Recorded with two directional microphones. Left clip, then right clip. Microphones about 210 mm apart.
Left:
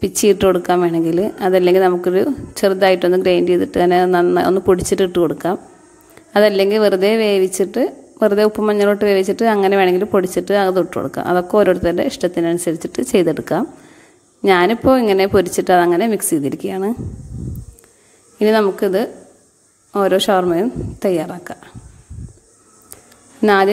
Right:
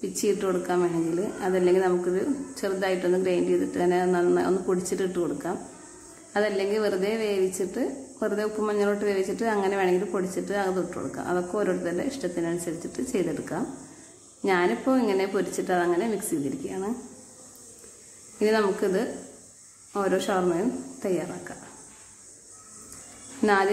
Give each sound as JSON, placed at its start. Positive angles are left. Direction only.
{"t": 0.0, "sound": "a woman's voice", "side_deg": 40}
{"t": 18.4, "sound": "a woman's voice", "side_deg": 40}
{"t": 23.4, "sound": "a woman's voice", "side_deg": 40}